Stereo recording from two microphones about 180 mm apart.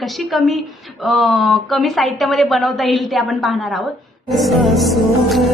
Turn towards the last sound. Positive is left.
turn(degrees=0)  # may be behind; listen again after turning